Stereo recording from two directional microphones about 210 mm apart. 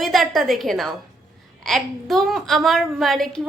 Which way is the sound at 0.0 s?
Centre (ahead or behind).